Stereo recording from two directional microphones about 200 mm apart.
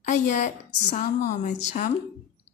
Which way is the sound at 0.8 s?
40° left (ahead or behind).